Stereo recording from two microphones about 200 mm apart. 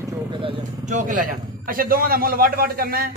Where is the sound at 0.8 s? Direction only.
40° right (ahead or behind).